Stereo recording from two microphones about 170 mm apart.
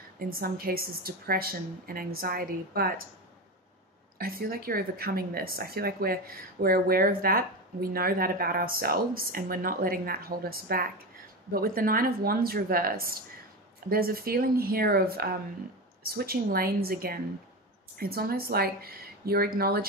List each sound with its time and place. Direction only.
0.3 s a woman's voice: 60° right (ahead or behind)
4.2 s a woman's voice: 60° right (ahead or behind)